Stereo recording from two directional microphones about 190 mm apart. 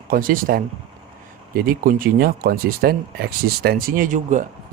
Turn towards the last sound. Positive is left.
turn(degrees=-40)  # may be behind; listen again after turning